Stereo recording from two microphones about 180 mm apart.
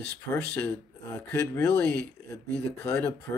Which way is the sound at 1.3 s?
15° left (ahead or behind).